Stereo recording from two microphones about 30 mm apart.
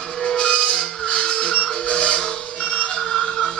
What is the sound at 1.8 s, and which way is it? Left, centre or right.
Printer, left.